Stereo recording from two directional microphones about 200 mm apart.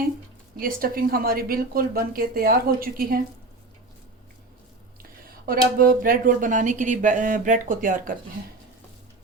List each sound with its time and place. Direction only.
0.6 s speech: 45° right (ahead or behind)
5.5 s speech: 45° right (ahead or behind)